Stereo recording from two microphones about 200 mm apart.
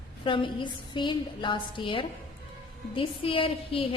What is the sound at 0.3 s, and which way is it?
A woman's voice, 25° left (ahead or behind).